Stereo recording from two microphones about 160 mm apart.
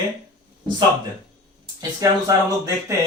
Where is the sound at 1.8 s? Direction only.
20° right (ahead or behind).